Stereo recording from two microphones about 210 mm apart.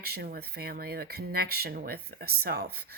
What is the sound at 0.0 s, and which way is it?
Speech, 50° right (ahead or behind).